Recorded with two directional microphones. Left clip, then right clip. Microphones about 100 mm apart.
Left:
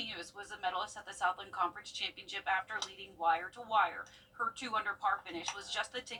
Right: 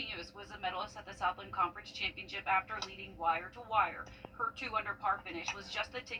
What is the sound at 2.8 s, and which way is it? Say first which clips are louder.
Speech: left 1 dB; 15° left (ahead or behind).